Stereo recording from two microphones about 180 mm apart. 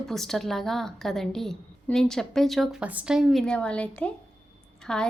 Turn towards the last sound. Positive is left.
turn(degrees=5)  # may be behind; listen again after turning